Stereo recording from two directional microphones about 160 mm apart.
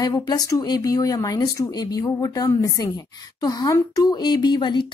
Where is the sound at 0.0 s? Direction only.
20° left (ahead or behind).